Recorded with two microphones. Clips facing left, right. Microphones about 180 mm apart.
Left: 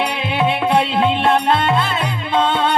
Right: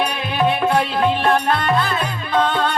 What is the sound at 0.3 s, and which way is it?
Music, 25° left (ahead or behind).